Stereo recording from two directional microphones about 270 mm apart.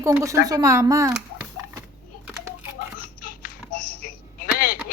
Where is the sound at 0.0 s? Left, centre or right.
Centre.